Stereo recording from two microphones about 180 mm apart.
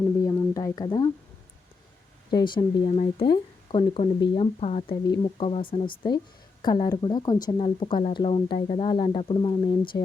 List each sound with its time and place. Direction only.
0.2 s speech: 20° left (ahead or behind)
2.3 s speech: 25° left (ahead or behind)